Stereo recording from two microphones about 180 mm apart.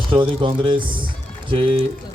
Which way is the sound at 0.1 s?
30° right (ahead or behind).